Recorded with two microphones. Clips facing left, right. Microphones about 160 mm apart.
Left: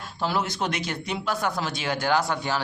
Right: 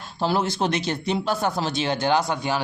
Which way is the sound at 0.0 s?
30° right (ahead or behind).